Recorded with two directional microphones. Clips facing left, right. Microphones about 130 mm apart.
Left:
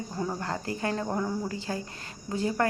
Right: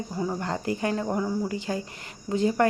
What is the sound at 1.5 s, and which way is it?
Speech, 20° right (ahead or behind).